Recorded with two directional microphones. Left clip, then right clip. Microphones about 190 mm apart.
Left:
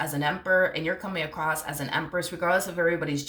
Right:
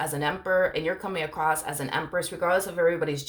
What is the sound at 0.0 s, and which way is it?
Speech, 35° right (ahead or behind).